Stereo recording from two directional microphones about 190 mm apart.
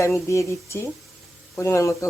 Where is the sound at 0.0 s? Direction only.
15° left (ahead or behind).